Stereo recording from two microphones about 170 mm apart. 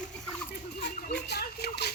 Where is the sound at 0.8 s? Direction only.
75° left (ahead or behind).